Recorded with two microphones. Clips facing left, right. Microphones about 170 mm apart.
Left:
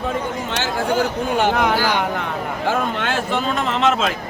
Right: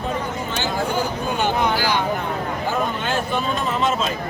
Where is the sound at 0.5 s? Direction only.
80° left; by 2.0 s 55° left (ahead or behind).